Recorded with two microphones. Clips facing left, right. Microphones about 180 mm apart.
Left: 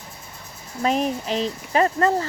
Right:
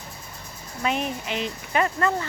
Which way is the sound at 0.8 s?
35° left (ahead or behind).